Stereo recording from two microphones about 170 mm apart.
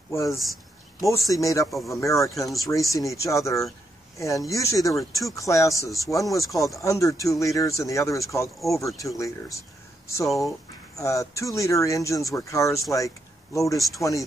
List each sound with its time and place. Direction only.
0.1 s speech: 15° left (ahead or behind)
0.4 s a sound: centre (ahead or behind)
1.0 s speech: 20° left (ahead or behind)
10.2 s speech: centre (ahead or behind)
11.0 s speech: 20° left (ahead or behind)